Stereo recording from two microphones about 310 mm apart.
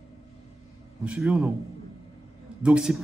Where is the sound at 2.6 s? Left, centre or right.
Centre.